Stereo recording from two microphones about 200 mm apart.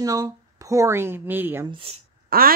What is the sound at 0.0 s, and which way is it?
Speech, 15° right (ahead or behind).